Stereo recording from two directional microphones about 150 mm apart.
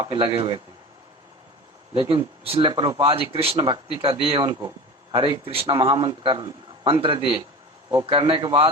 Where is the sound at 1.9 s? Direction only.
35° right (ahead or behind).